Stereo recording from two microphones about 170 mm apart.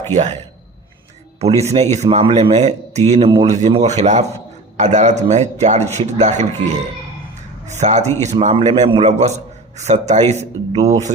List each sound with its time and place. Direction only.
1.4 s a man's voice: 40° right (ahead or behind)
7.7 s a man's voice: 45° right (ahead or behind)